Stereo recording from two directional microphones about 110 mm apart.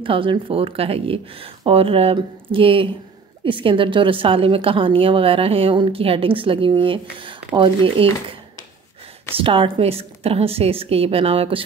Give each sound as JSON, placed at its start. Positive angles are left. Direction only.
{"t": 0.0, "sound": "a woman's voice", "side_deg": -50}